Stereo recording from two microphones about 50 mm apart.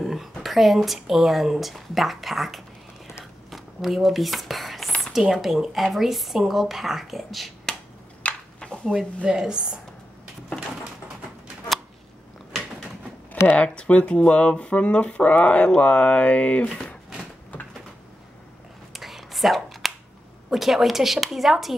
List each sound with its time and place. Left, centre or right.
0.0 s a sound: centre
0.4 s speech: centre
3.4 s whispering: centre
5.1 s speech: centre
8.2 s a sound: left
8.9 s a woman's voice: centre
13.6 s speech: left
16.6 s speech: centre
18.9 s a sound: centre
20.5 s speech: centre